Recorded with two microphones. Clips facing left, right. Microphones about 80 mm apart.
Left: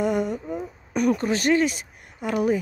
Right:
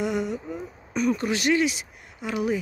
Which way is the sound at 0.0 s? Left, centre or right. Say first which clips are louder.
Left 3 dB; left.